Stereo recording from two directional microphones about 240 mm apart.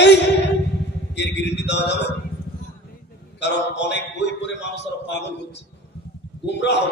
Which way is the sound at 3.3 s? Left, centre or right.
Left.